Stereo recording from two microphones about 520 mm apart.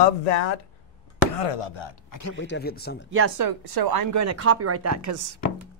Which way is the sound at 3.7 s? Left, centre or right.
Right.